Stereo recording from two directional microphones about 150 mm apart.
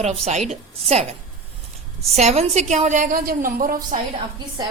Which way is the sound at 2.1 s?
45° right (ahead or behind).